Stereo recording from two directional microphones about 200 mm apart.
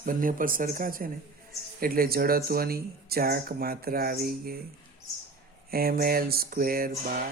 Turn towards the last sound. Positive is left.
turn(degrees=-45)  # may be behind; listen again after turning